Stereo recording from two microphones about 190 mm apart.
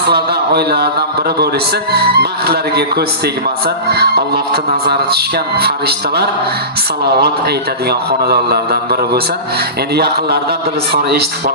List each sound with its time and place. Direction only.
0.1 s speech: 60° right (ahead or behind)
1.9 s music: 55° right (ahead or behind)
3.8 s music: 55° right (ahead or behind)
7.9 s music: 55° right (ahead or behind)
10.9 s music: 55° right (ahead or behind)